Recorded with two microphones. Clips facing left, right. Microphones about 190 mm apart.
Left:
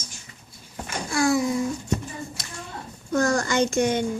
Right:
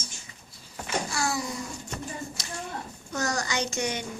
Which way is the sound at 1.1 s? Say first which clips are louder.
Left 13 dB; 55° left (ahead or behind).